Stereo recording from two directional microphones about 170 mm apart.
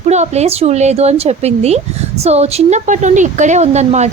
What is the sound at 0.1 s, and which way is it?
Speech, 40° right (ahead or behind).